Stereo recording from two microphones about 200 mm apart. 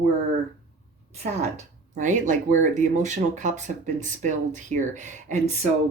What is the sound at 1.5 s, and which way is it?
Speech, 40° right (ahead or behind).